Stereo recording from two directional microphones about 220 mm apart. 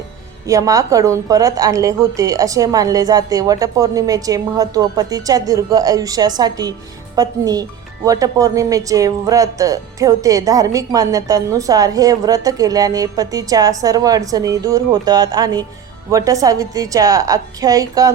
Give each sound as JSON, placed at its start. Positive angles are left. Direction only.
{"t": 0.4, "sound": "speech", "side_deg": -15}